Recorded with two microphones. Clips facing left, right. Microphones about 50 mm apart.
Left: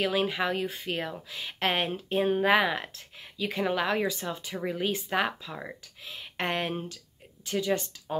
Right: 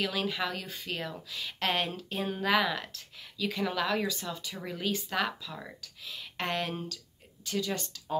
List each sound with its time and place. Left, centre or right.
0.0 s speech: left